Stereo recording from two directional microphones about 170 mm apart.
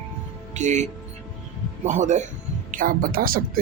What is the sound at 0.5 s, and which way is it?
Speech, 45° right (ahead or behind).